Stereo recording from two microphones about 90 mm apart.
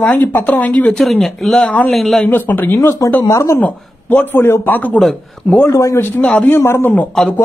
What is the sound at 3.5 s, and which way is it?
A man's voice, 20° left (ahead or behind).